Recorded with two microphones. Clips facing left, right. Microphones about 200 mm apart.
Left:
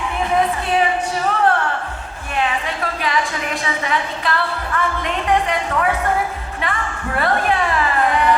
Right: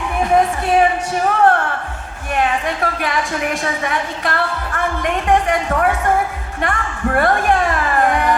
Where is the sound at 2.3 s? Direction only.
45° right (ahead or behind).